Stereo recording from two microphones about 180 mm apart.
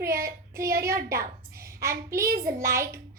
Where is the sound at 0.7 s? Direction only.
60° right (ahead or behind).